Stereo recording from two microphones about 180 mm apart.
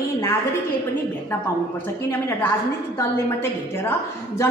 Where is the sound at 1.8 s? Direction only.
10° left (ahead or behind).